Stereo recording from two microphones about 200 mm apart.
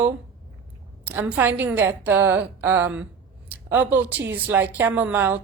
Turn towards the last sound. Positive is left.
turn(degrees=-10)  # may be behind; listen again after turning